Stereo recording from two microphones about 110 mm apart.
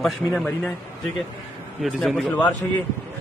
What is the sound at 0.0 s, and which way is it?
Speech, centre (ahead or behind).